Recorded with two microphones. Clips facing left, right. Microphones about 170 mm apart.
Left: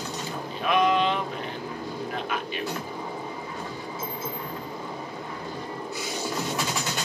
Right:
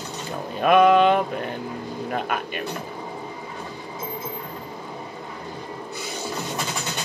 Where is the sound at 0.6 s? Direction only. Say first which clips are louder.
Right 7 dB; 55° right (ahead or behind).